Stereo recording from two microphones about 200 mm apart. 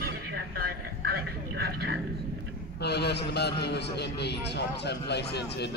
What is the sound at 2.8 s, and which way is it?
A man's voice, 55° left (ahead or behind).